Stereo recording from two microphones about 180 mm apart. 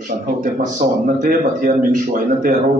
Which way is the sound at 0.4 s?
50° right (ahead or behind).